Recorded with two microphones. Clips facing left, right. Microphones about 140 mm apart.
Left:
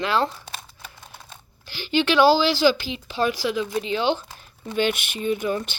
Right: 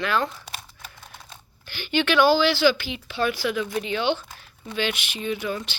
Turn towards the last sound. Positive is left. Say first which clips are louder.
# left 4 dB
turn(degrees=40)  # may be behind; listen again after turning